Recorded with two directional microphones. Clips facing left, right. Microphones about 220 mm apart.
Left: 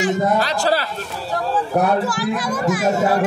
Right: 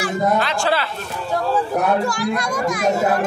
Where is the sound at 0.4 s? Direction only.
40° left (ahead or behind).